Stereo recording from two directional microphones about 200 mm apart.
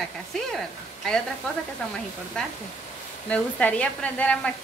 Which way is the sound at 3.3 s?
5° left (ahead or behind).